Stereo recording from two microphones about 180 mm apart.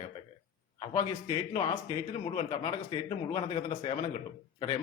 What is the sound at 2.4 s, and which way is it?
A man's voice, 30° left (ahead or behind).